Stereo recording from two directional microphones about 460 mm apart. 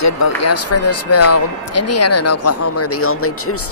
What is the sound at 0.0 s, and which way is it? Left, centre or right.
Speech, left.